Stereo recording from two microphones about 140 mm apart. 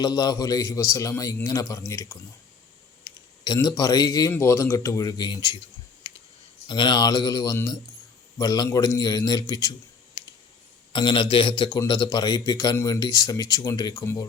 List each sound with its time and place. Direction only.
0.0 s speech: 30° left (ahead or behind)
6.0 s clicking: 35° left (ahead or behind)
6.7 s speech: 35° left (ahead or behind)
10.9 s a man's voice: 35° left (ahead or behind)